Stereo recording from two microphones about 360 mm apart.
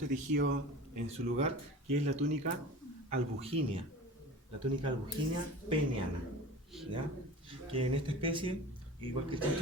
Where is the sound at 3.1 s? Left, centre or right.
Centre.